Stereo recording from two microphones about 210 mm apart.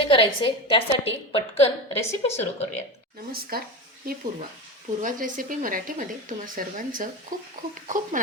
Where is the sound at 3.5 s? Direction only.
45° right (ahead or behind).